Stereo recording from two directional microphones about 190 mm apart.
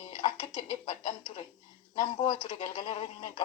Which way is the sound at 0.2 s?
25° left (ahead or behind).